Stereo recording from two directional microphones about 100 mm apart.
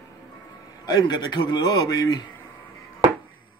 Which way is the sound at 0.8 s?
45° left (ahead or behind).